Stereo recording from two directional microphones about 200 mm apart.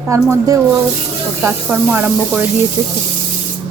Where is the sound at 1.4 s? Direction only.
10° right (ahead or behind).